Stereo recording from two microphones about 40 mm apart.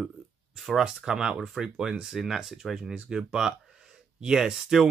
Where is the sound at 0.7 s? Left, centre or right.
Centre.